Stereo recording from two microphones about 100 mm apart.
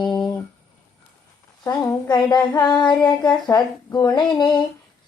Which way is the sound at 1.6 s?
40° left (ahead or behind).